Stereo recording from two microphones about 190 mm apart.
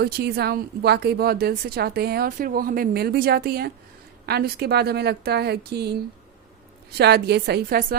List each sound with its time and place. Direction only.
0.0 s a woman's voice: 55° right (ahead or behind)